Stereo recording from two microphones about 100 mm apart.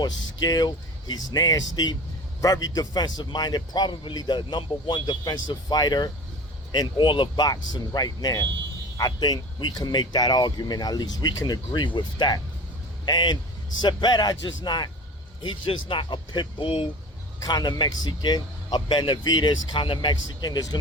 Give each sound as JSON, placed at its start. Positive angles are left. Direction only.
{"t": 0.0, "sound": "a man's voice", "side_deg": 45}
{"t": 17.4, "sound": "a man's voice", "side_deg": 45}